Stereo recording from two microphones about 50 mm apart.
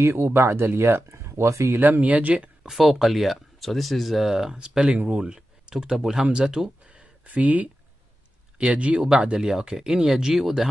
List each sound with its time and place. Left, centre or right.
0.0 s speech: right
1.3 s speech: right
1.8 s speech: right
2.7 s speech: centre
4.6 s speech: centre
7.2 s speech: right; by 10.7 s centre